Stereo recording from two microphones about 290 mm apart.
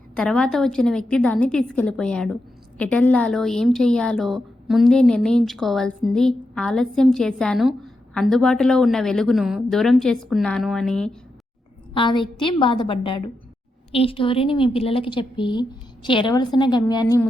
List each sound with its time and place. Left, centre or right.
0.2 s a woman's voice: centre
11.9 s a woman's voice: centre